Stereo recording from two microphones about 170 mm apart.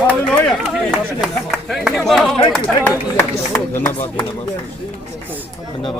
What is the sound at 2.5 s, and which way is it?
Speech, 5° left (ahead or behind).